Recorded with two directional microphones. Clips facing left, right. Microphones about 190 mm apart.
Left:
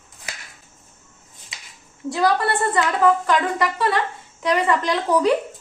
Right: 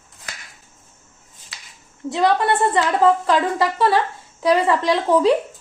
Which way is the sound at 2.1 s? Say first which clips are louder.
Right 2 dB; 20° right (ahead or behind).